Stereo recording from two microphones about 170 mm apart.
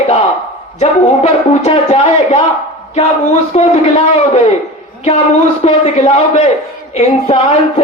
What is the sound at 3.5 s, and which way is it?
Speech, 40° left (ahead or behind).